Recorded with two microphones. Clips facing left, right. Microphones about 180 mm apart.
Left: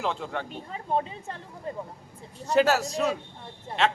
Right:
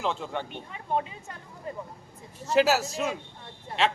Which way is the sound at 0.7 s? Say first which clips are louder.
Left 2 dB; 35° left (ahead or behind).